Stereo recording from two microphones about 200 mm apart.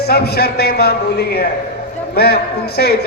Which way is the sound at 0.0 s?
55° left (ahead or behind).